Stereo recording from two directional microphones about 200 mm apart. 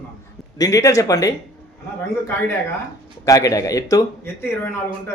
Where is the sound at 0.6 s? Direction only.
15° left (ahead or behind).